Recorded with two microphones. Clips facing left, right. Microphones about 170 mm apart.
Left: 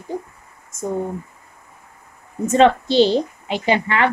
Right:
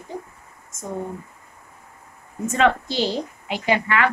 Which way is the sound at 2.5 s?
25° left (ahead or behind).